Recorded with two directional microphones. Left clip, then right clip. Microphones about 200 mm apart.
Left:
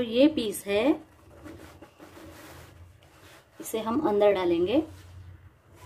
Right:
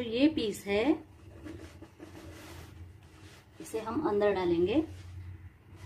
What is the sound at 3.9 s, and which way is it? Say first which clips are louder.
Speech: left 6 dB; 30° left (ahead or behind).